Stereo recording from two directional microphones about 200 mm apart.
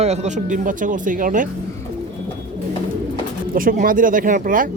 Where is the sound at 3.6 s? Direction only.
45° right (ahead or behind).